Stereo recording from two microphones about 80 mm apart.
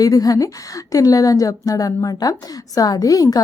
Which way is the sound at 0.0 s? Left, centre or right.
Left.